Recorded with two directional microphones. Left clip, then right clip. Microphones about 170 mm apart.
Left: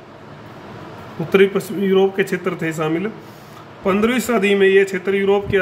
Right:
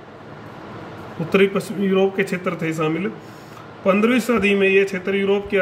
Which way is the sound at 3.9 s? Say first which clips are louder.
Even; 35° left (ahead or behind).